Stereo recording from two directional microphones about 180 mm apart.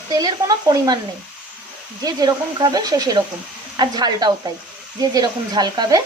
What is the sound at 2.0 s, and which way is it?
Speech, 20° right (ahead or behind).